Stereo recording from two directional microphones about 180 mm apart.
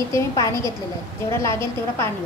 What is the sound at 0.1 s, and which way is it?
A woman's voice, 15° left (ahead or behind).